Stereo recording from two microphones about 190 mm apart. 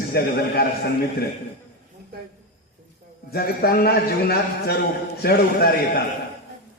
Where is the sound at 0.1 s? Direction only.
55° left (ahead or behind).